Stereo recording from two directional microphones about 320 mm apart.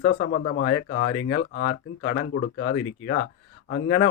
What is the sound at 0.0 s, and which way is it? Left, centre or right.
Speech, left.